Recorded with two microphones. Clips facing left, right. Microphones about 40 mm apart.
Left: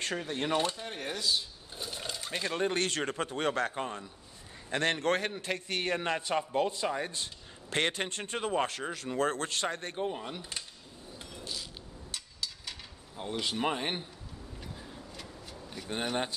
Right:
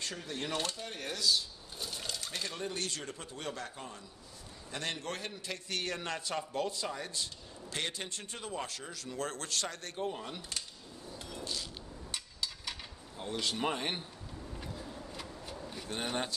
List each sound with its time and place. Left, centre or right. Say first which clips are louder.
0.0 s a man's voice: left 6 dB; left
0.6 s speech: left 5 dB; left
2.4 s a man's voice: left 10 dB; left
10.0 s a man's voice: left 3 dB; centre
11.3 s a sound: right 1 dB; centre
12.1 s a sound: even; centre
13.2 s a man's voice: left 2 dB; centre
15.1 s a sound: right 2 dB; centre
15.9 s speech: left 4 dB; left